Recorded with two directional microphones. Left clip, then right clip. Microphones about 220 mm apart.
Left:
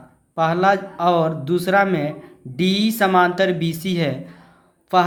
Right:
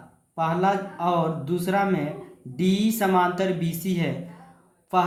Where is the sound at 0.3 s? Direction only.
35° left (ahead or behind).